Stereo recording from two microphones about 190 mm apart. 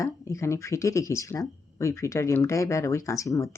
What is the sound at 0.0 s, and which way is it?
Speech, 15° left (ahead or behind).